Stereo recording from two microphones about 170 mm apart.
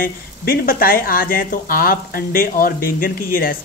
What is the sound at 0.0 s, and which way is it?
Speech, 60° left (ahead or behind).